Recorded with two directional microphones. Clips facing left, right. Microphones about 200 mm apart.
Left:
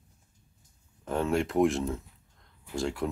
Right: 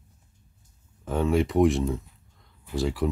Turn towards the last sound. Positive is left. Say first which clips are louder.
# right 4 dB
turn(degrees=0)  # may be behind; listen again after turning